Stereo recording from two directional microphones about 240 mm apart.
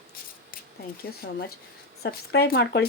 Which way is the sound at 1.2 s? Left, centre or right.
Left.